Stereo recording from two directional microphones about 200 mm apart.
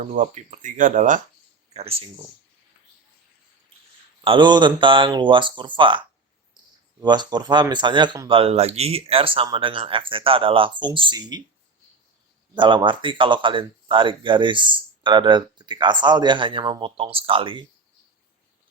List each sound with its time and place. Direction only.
0.0 s speech: 35° right (ahead or behind)
1.7 s speech: 30° right (ahead or behind)
4.2 s speech: 25° right (ahead or behind)
12.5 s speech: 25° right (ahead or behind)